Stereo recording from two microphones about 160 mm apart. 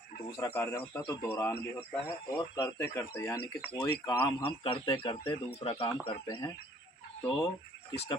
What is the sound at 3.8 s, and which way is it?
Speech, 30° left (ahead or behind).